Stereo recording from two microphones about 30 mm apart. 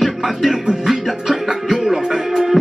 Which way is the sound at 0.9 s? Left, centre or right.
Centre.